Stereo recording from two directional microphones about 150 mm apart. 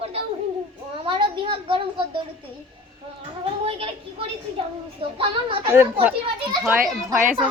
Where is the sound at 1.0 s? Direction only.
35° right (ahead or behind).